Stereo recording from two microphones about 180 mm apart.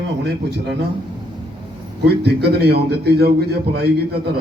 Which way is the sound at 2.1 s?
65° right (ahead or behind).